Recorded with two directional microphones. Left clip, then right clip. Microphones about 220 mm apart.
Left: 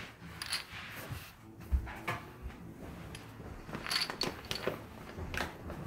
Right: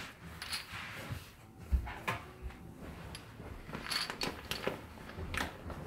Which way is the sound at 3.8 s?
15° left (ahead or behind).